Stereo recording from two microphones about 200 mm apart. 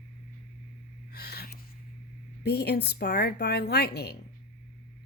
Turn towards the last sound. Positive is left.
turn(degrees=55)  # may be behind; listen again after turning